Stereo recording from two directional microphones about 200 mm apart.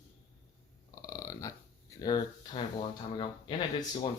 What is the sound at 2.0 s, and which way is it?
Speech, 20° left (ahead or behind).